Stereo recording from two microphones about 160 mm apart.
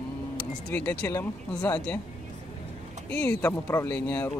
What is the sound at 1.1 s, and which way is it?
Speech, 20° left (ahead or behind).